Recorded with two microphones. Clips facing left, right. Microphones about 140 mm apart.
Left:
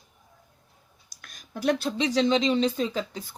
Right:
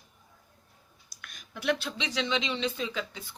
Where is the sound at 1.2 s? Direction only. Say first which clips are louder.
Left 4 dB; 40° left (ahead or behind).